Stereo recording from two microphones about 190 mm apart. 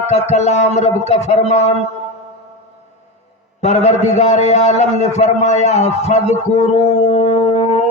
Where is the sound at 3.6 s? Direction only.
35° left (ahead or behind).